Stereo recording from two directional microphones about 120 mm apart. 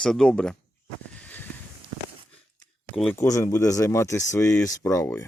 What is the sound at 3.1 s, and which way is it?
Speech, 25° left (ahead or behind).